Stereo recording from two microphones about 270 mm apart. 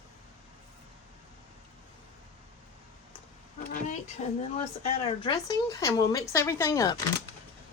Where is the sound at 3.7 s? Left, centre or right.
Left.